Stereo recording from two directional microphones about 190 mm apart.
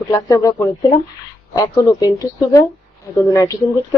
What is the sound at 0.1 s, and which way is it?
A woman's voice, 15° left (ahead or behind).